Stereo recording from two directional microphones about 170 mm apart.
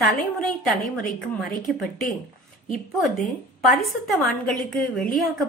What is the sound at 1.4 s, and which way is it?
Speech, centre (ahead or behind).